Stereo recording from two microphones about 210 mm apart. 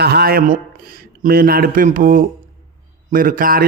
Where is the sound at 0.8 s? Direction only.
45° right (ahead or behind).